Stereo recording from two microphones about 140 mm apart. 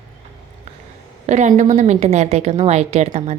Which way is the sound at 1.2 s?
55° right (ahead or behind).